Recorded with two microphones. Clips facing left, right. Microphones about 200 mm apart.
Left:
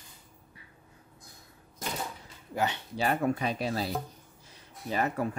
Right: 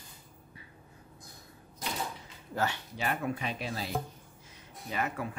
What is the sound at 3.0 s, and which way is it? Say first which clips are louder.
Speech: left 5 dB; 40° left (ahead or behind).